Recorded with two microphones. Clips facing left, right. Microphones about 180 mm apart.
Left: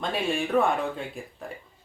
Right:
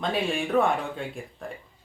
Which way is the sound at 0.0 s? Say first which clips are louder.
Right 1 dB; centre (ahead or behind).